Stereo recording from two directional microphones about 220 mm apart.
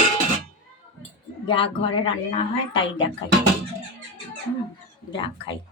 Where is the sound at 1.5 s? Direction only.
25° left (ahead or behind).